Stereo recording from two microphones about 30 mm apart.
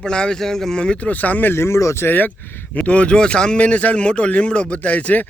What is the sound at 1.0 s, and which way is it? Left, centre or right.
Speech, left.